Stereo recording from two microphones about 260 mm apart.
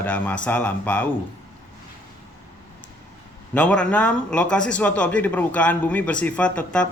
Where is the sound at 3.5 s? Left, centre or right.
Centre.